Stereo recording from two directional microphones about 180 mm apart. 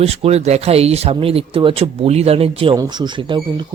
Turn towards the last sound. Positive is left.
turn(degrees=-25)  # may be behind; listen again after turning